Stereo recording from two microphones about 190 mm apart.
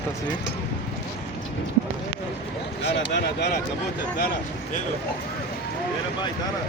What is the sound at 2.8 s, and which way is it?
Speech, 65° left (ahead or behind).